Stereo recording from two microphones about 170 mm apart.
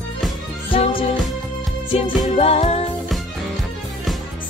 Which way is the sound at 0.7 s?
30° left (ahead or behind).